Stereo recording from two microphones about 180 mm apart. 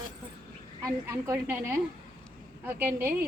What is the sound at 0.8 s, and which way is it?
A woman's voice, 15° right (ahead or behind).